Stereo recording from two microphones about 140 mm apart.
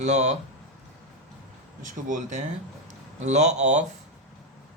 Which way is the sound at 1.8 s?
65° right (ahead or behind).